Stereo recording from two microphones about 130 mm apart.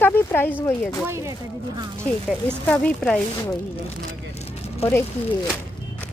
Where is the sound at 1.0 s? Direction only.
20° right (ahead or behind).